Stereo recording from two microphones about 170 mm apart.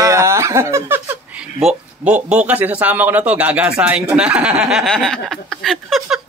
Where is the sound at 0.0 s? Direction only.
15° right (ahead or behind).